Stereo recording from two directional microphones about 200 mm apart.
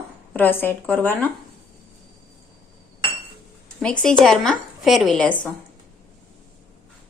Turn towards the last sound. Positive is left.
turn(degrees=5)  # may be behind; listen again after turning